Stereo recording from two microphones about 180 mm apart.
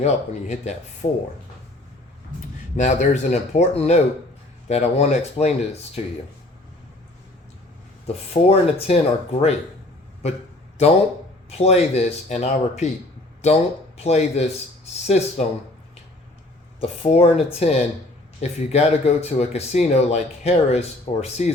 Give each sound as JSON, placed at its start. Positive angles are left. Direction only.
{"t": 0.0, "sound": "speech", "side_deg": 35}
{"t": 2.7, "sound": "speech", "side_deg": 40}
{"t": 8.0, "sound": "speech", "side_deg": 35}
{"t": 11.4, "sound": "speech", "side_deg": 35}
{"t": 16.8, "sound": "speech", "side_deg": 35}